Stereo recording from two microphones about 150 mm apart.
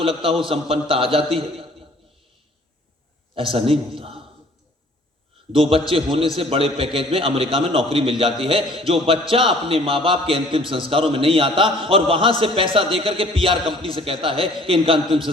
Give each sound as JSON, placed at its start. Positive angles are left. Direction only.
{"t": 0.0, "sound": "a man's voice", "side_deg": -35}
{"t": 3.3, "sound": "a man's voice", "side_deg": -35}
{"t": 5.5, "sound": "a man's voice", "side_deg": -40}